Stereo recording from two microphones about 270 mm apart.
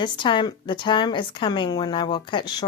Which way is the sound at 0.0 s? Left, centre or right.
Centre.